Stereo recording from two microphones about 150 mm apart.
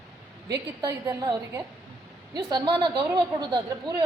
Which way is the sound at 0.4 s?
25° right (ahead or behind).